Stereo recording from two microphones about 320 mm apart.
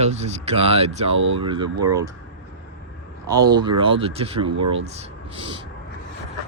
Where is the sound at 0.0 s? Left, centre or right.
Right.